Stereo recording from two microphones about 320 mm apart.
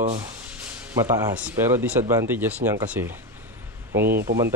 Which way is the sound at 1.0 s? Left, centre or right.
Centre.